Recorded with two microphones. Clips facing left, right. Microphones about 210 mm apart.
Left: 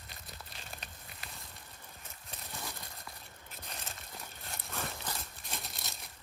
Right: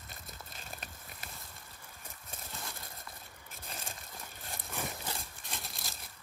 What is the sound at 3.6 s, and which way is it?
Crumpling, centre (ahead or behind).